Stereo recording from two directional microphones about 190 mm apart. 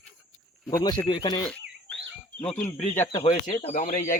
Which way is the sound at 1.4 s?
5° left (ahead or behind).